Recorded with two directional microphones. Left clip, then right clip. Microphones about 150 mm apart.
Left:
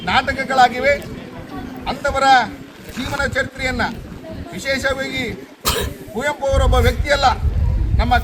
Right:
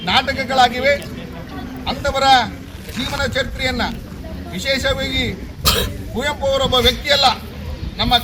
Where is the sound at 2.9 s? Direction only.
90° left.